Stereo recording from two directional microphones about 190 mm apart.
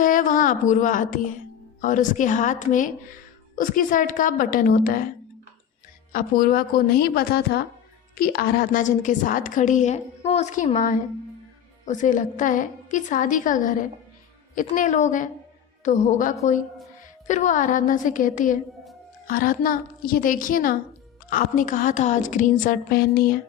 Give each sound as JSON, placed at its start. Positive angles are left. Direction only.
{"t": 0.0, "sound": "a sound", "side_deg": 45}
{"t": 1.8, "sound": "a woman's voice", "side_deg": 45}
{"t": 6.1, "sound": "a woman's voice", "side_deg": 45}